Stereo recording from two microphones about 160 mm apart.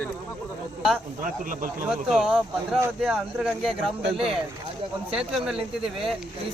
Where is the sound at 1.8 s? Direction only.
5° right (ahead or behind).